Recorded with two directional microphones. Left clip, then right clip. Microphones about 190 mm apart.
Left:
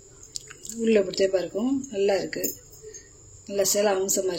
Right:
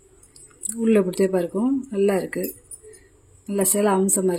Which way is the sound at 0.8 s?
60° right (ahead or behind).